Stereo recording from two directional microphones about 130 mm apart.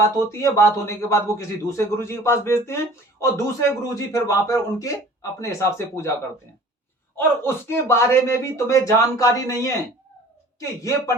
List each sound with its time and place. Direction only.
0.2 s a man's voice: 25° left (ahead or behind)
7.2 s a man's voice: 20° left (ahead or behind)